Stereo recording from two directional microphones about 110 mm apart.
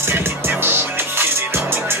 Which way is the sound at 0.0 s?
20° right (ahead or behind).